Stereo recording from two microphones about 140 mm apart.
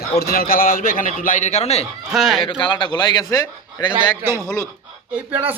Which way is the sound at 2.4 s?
40° left (ahead or behind).